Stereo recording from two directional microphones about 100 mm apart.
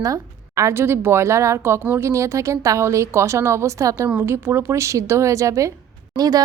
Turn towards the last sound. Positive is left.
turn(degrees=-40)  # may be behind; listen again after turning